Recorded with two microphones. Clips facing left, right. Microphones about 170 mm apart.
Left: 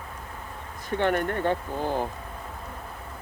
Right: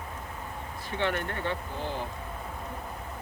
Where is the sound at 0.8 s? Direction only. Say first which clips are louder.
Left 6 dB; 45° left (ahead or behind).